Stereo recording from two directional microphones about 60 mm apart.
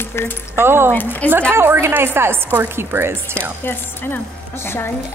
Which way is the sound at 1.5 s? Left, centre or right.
Right.